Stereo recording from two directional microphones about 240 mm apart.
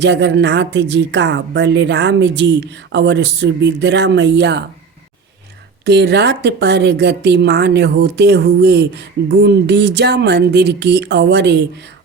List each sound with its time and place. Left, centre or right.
0.0 s a woman's voice: right
5.8 s a woman's voice: right